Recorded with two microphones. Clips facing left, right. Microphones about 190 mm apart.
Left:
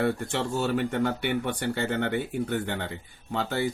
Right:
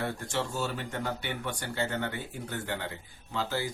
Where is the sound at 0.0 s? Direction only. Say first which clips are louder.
Left 6 dB; 60° left (ahead or behind).